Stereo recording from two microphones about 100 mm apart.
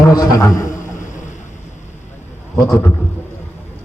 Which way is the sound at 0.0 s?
40° left (ahead or behind).